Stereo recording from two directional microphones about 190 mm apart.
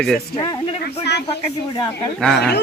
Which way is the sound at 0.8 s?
60° left (ahead or behind).